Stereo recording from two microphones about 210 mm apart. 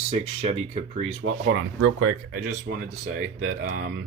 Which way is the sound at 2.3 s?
45° right (ahead or behind).